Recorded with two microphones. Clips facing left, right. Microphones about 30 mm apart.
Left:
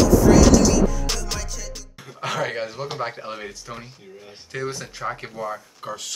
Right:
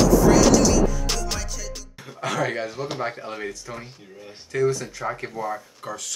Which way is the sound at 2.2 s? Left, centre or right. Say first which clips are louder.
Even; centre.